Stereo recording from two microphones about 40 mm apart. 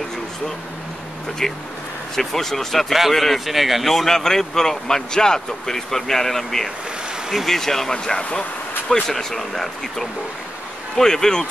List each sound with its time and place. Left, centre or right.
1.4 s a man's voice: centre
3.9 s a man's voice: centre
9.0 s a man's voice: centre